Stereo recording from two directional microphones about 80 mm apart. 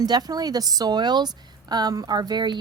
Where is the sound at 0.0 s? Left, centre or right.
Right.